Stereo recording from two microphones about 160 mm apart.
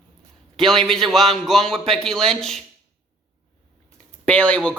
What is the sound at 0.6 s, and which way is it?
Speech, centre (ahead or behind).